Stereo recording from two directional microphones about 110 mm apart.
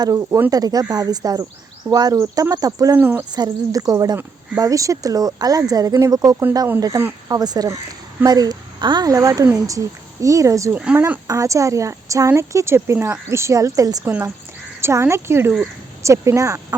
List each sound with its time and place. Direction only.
0.0 s speech: 30° right (ahead or behind)
0.5 s a woman's voice: 35° right (ahead or behind)
3.0 s speech: 20° right (ahead or behind)
3.3 s a woman's voice: 35° right (ahead or behind)
10.8 s speech: 10° right (ahead or behind)
11.3 s speech: 30° right (ahead or behind)
14.0 s speech: 20° right (ahead or behind)